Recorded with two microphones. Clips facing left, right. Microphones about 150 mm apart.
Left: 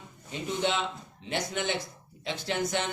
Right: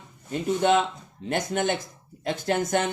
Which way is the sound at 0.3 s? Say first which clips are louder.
Right 8 dB; 50° right (ahead or behind).